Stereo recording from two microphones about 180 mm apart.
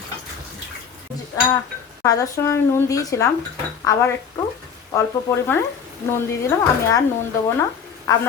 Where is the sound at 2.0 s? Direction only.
20° left (ahead or behind).